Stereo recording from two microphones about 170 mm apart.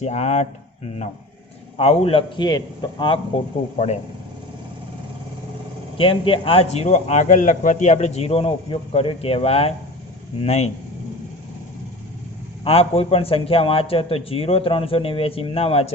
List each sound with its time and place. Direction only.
0.0 s speech: 40° left (ahead or behind)
1.8 s speech: 35° left (ahead or behind)
3.3 s speech: 35° left (ahead or behind)
6.0 s speech: 30° left (ahead or behind)
12.6 s speech: 35° left (ahead or behind)